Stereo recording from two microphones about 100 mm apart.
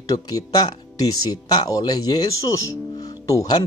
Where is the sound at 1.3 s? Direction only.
40° left (ahead or behind).